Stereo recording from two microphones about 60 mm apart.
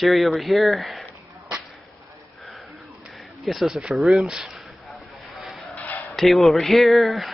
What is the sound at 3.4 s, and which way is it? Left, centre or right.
Speech, centre.